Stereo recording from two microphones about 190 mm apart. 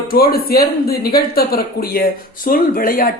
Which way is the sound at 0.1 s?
50° left (ahead or behind).